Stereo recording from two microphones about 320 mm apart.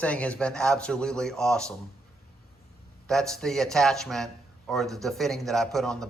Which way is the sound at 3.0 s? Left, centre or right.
Centre.